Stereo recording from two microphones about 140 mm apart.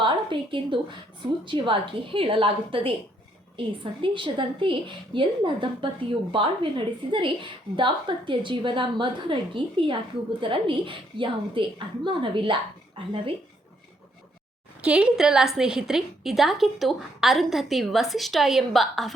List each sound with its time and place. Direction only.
0.0 s a woman's voice: 35° right (ahead or behind)
14.8 s a woman's voice: 5° right (ahead or behind)